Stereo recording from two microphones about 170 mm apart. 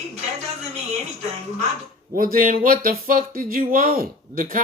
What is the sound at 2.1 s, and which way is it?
Speech, 55° right (ahead or behind).